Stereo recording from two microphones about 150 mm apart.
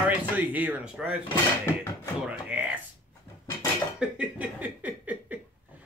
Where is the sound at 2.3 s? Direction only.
10° right (ahead or behind).